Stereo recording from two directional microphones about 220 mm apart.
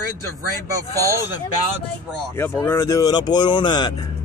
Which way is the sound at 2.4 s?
10° left (ahead or behind).